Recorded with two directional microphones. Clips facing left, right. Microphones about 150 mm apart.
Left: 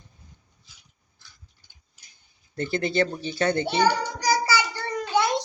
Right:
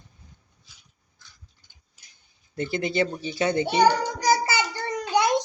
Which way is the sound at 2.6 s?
10° right (ahead or behind).